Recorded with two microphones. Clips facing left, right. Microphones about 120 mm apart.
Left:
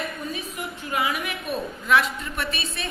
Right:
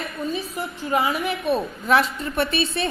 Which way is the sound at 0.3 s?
30° right (ahead or behind).